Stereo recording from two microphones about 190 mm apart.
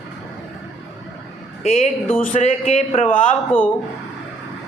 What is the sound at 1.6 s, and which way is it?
Speech, 40° left (ahead or behind).